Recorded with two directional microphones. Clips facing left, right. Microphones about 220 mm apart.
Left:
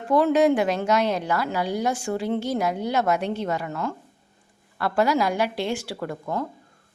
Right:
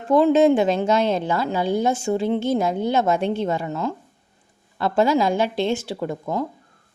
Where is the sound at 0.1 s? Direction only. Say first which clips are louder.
Right 3 dB; 20° right (ahead or behind).